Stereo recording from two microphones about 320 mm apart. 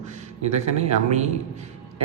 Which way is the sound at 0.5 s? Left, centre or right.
Right.